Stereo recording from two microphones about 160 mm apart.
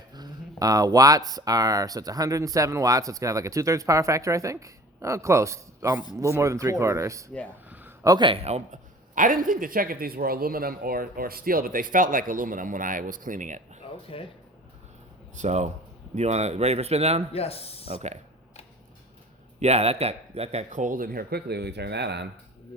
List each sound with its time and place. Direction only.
0.1 s speech: 25° right (ahead or behind)
7.7 s a sound: 10° right (ahead or behind)
8.0 s a man's voice: 25° right (ahead or behind); by 13.8 s 50° right (ahead or behind)
14.1 s speech: 35° left (ahead or behind)
15.4 s a man's voice: 45° right (ahead or behind)
17.3 s speech: 40° left (ahead or behind)
17.8 s a man's voice: 40° right (ahead or behind)
19.5 s a man's voice: 45° right (ahead or behind); by 22.3 s 90° right